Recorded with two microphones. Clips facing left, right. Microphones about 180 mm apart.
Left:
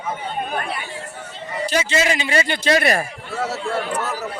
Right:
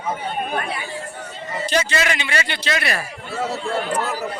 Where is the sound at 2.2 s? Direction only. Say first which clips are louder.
Left 4 dB; 40° left (ahead or behind).